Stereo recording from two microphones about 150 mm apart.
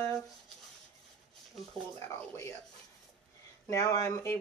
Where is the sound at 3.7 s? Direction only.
20° left (ahead or behind).